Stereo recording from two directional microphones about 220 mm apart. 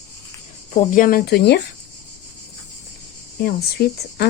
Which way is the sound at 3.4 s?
45° left (ahead or behind).